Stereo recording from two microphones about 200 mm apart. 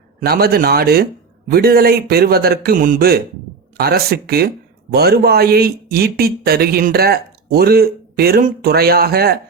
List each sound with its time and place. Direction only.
0.2 s speech: 50° right (ahead or behind)